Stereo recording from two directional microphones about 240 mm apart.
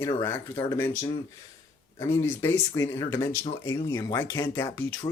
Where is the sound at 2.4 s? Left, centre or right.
Centre.